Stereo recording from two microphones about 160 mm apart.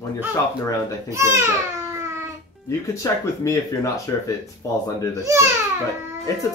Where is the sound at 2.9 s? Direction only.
20° left (ahead or behind).